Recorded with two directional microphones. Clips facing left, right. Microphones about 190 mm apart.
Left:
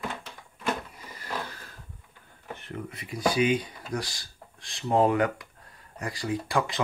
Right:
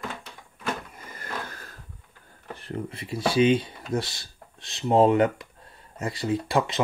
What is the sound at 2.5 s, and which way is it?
Speech, 35° right (ahead or behind).